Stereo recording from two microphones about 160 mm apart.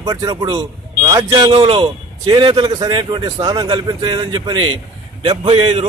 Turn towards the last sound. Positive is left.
turn(degrees=-30)  # may be behind; listen again after turning